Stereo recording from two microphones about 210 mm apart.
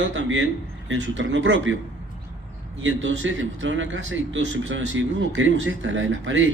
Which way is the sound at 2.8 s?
65° right (ahead or behind).